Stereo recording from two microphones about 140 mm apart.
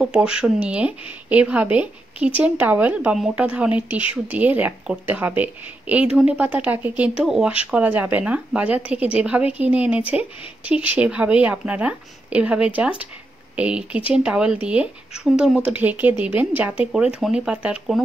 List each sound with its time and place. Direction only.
0.0 s speech: 5° right (ahead or behind)